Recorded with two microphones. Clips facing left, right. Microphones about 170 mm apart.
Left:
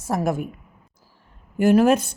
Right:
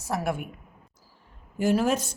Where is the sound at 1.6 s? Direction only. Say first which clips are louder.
Left 7 dB; 60° left (ahead or behind).